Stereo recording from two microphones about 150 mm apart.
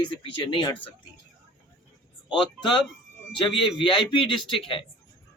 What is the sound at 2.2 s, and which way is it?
A man's voice, 30° left (ahead or behind).